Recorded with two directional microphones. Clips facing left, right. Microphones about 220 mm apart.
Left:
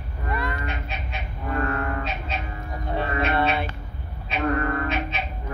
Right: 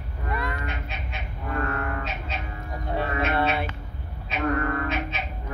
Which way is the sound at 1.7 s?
30° left (ahead or behind).